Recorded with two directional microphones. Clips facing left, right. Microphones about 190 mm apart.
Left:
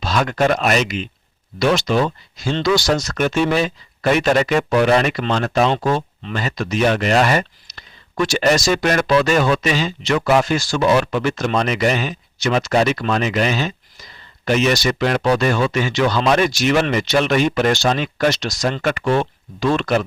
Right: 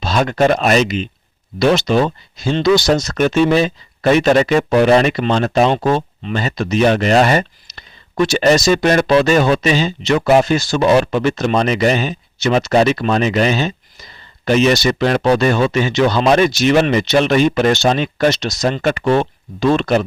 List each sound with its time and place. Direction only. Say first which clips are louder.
0.0 s speech: right 3 dB; 25° right (ahead or behind)
10.2 s speech: right 4 dB; 40° right (ahead or behind)
10.4 s speech: right 3 dB; 25° right (ahead or behind)